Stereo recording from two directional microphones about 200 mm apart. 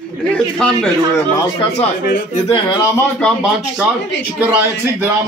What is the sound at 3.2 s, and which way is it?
A man's voice, centre (ahead or behind).